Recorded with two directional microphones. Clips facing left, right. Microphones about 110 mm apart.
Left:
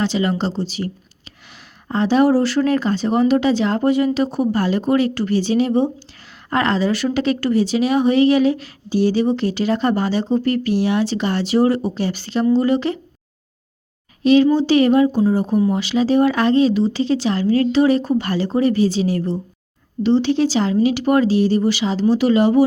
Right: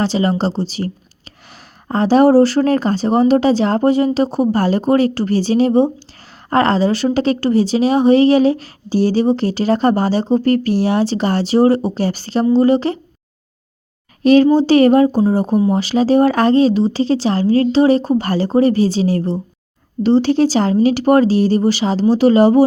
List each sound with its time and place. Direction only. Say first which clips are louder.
0.0 s a woman's voice: right 3 dB; 35° right (ahead or behind)
1.9 s a woman's voice: right 4 dB; 40° right (ahead or behind)
14.3 s a woman's voice: right 3 dB; 45° right (ahead or behind)